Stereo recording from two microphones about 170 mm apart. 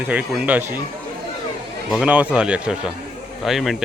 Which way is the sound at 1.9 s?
5° right (ahead or behind).